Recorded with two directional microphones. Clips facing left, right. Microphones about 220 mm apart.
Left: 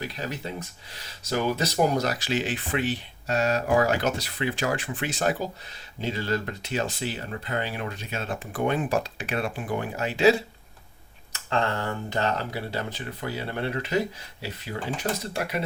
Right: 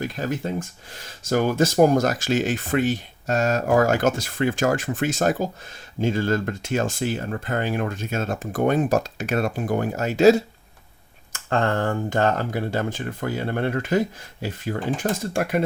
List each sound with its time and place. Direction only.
0.0 s speech: 50° right (ahead or behind)